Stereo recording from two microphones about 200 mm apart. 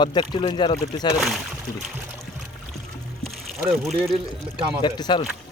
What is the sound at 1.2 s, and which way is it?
Speech, centre (ahead or behind).